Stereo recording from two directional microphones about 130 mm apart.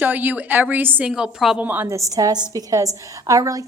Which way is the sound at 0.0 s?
15° right (ahead or behind).